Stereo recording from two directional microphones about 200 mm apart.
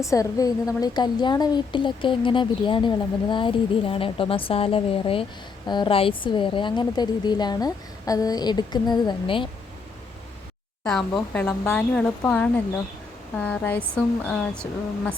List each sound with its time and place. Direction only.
0.0 s speech: 15° left (ahead or behind)
10.8 s speech: 5° left (ahead or behind)